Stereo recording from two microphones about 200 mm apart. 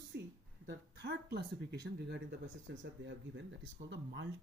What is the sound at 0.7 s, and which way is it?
Speech, 60° right (ahead or behind).